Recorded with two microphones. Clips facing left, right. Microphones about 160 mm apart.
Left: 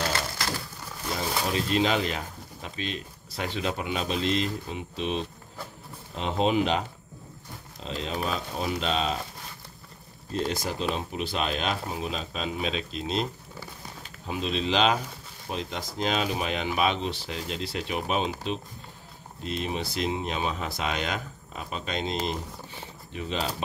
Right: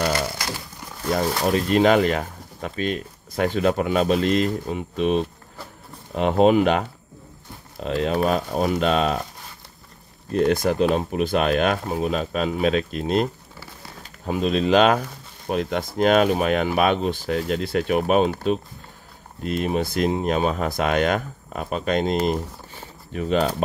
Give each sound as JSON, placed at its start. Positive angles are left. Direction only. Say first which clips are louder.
{"t": 1.5, "sound": "speech", "louder": "right 8 dB", "side_deg": -55}
{"t": 7.8, "sound": "speech", "louder": "right 10 dB", "side_deg": -60}
{"t": 10.3, "sound": "speech", "louder": "right 10 dB", "side_deg": -60}
{"t": 19.4, "sound": "speech", "louder": "right 8 dB", "side_deg": -50}